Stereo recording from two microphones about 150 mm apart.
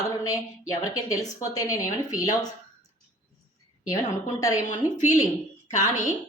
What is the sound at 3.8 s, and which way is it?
Speech, 20° left (ahead or behind).